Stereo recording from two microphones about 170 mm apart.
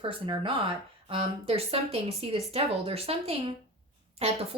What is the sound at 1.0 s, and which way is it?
Speech, 35° right (ahead or behind).